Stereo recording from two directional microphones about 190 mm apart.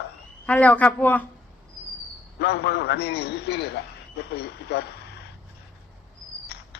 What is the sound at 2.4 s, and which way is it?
A man's voice, 60° left (ahead or behind).